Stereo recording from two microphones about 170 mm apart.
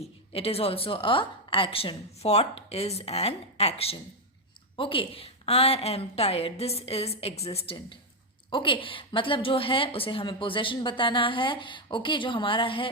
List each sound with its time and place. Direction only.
0.0 s a woman's voice: 35° left (ahead or behind)